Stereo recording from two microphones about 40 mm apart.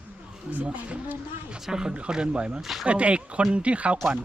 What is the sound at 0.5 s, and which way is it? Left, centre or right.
Speech, right.